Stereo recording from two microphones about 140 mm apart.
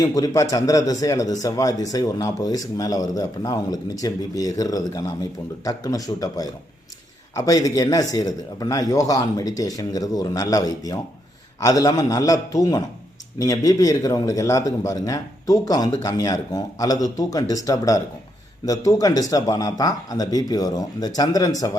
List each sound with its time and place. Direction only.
0.0 s a man's voice: 25° left (ahead or behind)